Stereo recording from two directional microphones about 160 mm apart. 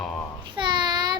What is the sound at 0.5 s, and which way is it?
Child singing, 30° right (ahead or behind).